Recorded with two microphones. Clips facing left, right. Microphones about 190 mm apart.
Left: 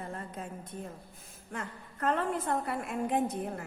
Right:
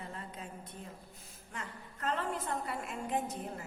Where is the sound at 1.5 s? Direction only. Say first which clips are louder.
Left 5 dB; 55° left (ahead or behind).